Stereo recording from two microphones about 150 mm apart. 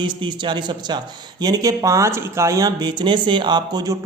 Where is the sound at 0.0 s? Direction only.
30° right (ahead or behind).